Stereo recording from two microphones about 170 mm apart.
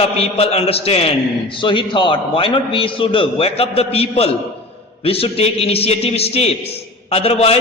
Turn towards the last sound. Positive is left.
turn(degrees=35)  # may be behind; listen again after turning